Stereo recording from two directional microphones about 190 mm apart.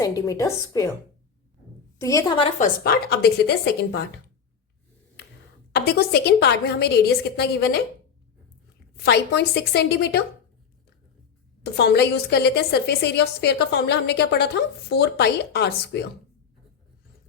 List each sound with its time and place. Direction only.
0.0 s a woman's voice: 20° left (ahead or behind)
2.0 s a woman's voice: 15° left (ahead or behind)
2.6 s a woman's voice: 50° left (ahead or behind)
5.7 s a woman's voice: 55° left (ahead or behind)
9.0 s a woman's voice: 60° left (ahead or behind)
11.6 s a woman's voice: 60° left (ahead or behind)